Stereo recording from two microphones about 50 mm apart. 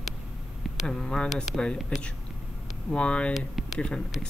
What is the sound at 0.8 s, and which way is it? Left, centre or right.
Speech, centre.